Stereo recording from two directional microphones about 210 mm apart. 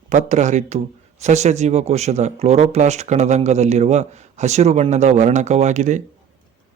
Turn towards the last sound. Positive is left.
turn(degrees=-35)  # may be behind; listen again after turning